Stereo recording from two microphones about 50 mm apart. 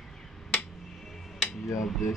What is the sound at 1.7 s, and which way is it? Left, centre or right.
Cutlery, left.